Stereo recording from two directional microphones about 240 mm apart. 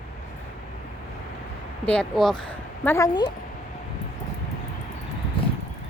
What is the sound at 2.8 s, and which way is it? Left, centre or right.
Speech, centre.